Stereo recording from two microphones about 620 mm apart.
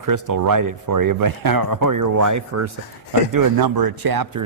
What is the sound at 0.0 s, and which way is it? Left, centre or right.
Speech, right.